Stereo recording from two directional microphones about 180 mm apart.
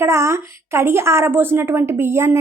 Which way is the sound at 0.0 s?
15° right (ahead or behind).